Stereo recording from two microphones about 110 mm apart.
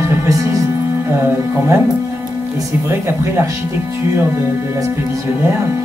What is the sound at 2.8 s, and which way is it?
Speech, 25° right (ahead or behind).